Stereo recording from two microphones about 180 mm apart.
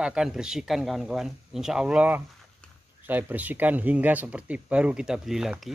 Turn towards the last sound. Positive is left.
turn(degrees=0)  # may be behind; listen again after turning